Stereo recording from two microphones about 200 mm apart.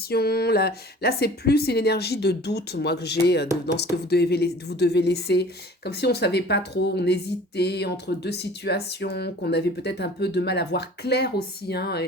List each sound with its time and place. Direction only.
0.1 s speech: 50° left (ahead or behind)